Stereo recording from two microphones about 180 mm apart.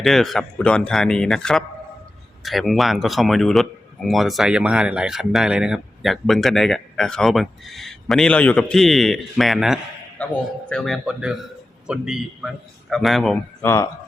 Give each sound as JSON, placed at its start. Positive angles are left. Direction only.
{"t": 0.0, "sound": "speech", "side_deg": 0}
{"t": 13.7, "sound": "speech", "side_deg": 15}